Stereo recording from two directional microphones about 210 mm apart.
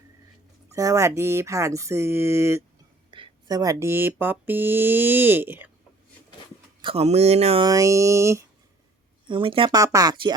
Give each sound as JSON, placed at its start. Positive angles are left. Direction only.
{"t": 0.7, "sound": "speech", "side_deg": -15}
{"t": 6.8, "sound": "speech", "side_deg": -30}
{"t": 7.7, "sound": "speech", "side_deg": -15}
{"t": 9.2, "sound": "speech", "side_deg": -25}